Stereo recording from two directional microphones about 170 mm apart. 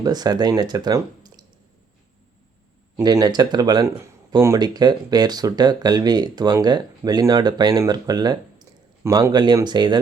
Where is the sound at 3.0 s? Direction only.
25° right (ahead or behind).